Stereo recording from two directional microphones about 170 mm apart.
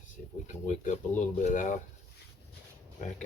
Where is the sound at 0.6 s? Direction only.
45° left (ahead or behind).